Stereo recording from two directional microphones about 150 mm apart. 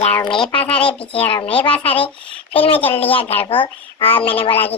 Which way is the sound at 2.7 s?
10° left (ahead or behind).